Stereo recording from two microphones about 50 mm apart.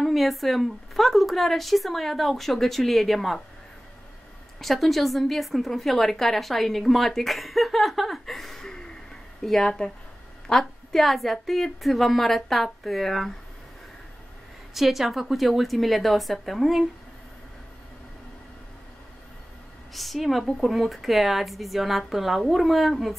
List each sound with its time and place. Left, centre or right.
0.0 s a woman's voice: centre
4.6 s a woman's voice: centre
14.7 s a woman's voice: centre
19.9 s a woman's voice: centre